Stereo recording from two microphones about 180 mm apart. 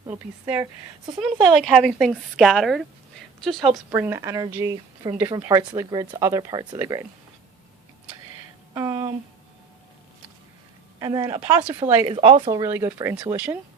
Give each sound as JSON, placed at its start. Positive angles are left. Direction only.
{"t": 0.6, "sound": "speech", "side_deg": -20}
{"t": 1.2, "sound": "speech", "side_deg": 0}
{"t": 3.9, "sound": "speech", "side_deg": -15}
{"t": 8.7, "sound": "a sound", "side_deg": -20}
{"t": 11.0, "sound": "speech", "side_deg": -20}